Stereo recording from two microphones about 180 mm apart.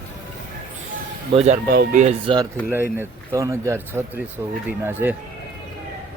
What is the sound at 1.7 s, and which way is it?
Speech, 50° right (ahead or behind).